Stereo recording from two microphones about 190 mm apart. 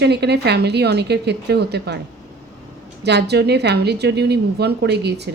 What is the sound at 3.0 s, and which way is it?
Speech, 60° right (ahead or behind).